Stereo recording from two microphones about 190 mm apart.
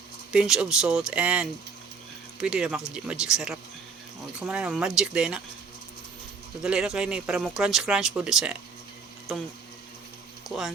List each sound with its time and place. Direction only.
0.3 s speech: 5° right (ahead or behind)
6.6 s speech: centre (ahead or behind)
10.5 s speech: 20° left (ahead or behind)